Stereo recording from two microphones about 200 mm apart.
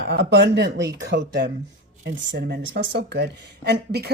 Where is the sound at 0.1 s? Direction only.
60° right (ahead or behind).